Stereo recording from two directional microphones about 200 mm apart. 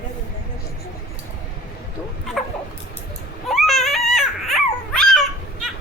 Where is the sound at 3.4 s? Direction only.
Centre (ahead or behind).